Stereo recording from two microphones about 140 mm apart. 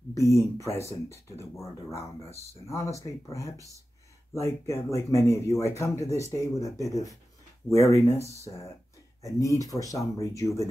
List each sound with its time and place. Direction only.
0.1 s speech: 20° left (ahead or behind)
3.5 s speech: 25° right (ahead or behind)
4.3 s speech: 20° left (ahead or behind)